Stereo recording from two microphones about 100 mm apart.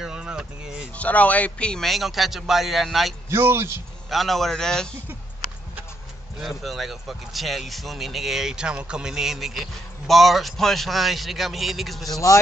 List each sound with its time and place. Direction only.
0.0 s speech: 10° right (ahead or behind)
0.9 s speech: 15° left (ahead or behind); by 3.2 s centre (ahead or behind)
3.3 s a man's voice: 25° right (ahead or behind)
4.1 s speech: centre (ahead or behind)
6.6 s speech: centre (ahead or behind)
12.1 s speech: 35° left (ahead or behind)